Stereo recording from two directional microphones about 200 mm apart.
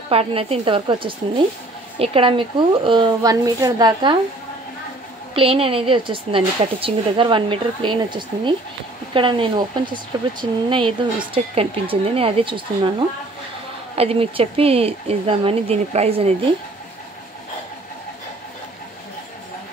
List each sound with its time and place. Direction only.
0.1 s speech: 30° right (ahead or behind)
5.3 s speech: 25° right (ahead or behind)
13.9 s speech: 30° right (ahead or behind)